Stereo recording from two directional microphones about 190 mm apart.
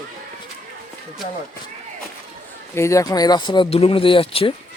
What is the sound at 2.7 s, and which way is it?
Speech, 15° left (ahead or behind).